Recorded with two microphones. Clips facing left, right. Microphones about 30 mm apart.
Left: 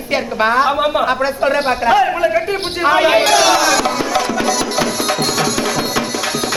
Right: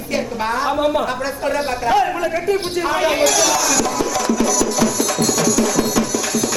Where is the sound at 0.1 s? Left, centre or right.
Left.